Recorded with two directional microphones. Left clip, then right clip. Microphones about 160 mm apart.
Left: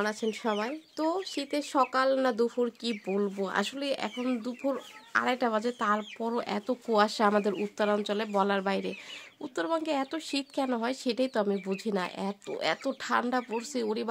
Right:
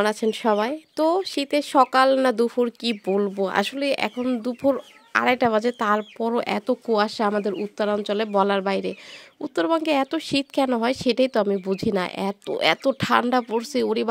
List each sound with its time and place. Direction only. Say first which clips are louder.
0.0 s speech: right 9 dB; 50° right (ahead or behind)
6.9 s a woman's voice: right 2 dB; 20° right (ahead or behind); by 14.0 s 45° right (ahead or behind)